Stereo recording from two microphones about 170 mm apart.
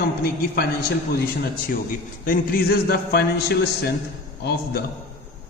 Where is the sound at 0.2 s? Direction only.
65° left (ahead or behind).